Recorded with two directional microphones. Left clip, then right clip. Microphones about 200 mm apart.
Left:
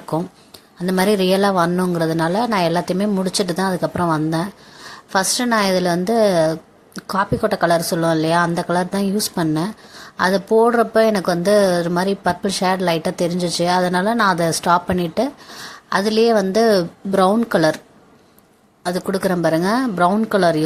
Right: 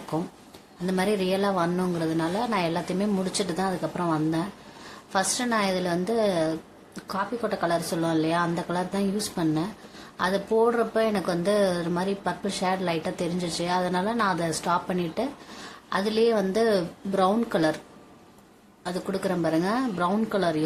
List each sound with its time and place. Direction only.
0.1 s speech: 35° left (ahead or behind)
18.8 s speech: 35° left (ahead or behind)